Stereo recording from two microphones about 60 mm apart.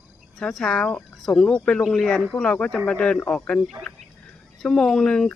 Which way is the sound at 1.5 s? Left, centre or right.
Left.